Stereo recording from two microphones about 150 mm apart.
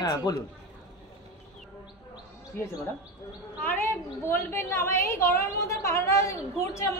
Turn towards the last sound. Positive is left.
turn(degrees=20)  # may be behind; listen again after turning